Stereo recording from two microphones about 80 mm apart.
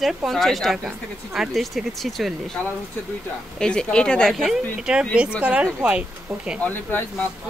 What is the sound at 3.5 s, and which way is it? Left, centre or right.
Speech, centre.